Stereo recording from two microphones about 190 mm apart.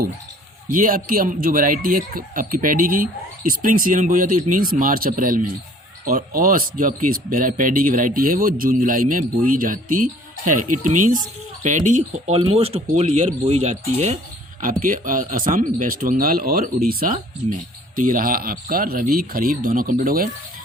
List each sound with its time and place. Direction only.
0.7 s speech: 45° right (ahead or behind)
14.6 s speech: 45° right (ahead or behind)